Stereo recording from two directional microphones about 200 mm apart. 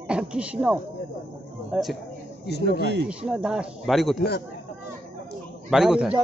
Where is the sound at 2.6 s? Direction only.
55° right (ahead or behind).